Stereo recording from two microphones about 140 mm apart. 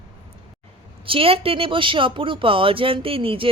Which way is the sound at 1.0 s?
40° right (ahead or behind).